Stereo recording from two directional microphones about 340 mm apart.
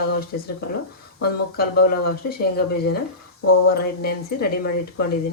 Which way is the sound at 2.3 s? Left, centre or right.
Left.